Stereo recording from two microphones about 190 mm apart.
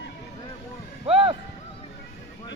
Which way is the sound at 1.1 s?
30° right (ahead or behind).